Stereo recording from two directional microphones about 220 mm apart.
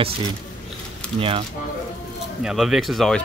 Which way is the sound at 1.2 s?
25° right (ahead or behind).